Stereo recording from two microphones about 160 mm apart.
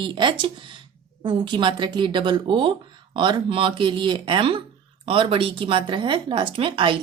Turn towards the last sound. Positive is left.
turn(degrees=-30)  # may be behind; listen again after turning